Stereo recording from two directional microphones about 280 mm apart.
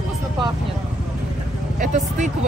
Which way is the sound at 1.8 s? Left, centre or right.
Right.